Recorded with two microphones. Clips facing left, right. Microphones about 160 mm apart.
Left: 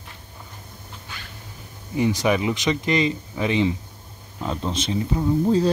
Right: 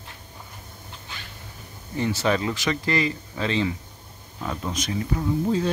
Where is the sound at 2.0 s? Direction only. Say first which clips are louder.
Left 3 dB; 15° left (ahead or behind).